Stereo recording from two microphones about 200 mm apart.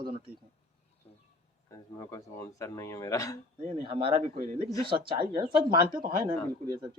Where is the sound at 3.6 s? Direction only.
30° right (ahead or behind).